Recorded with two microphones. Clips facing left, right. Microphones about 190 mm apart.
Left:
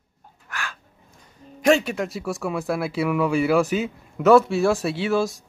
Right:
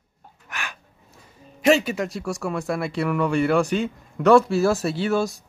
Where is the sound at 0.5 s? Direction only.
20° right (ahead or behind).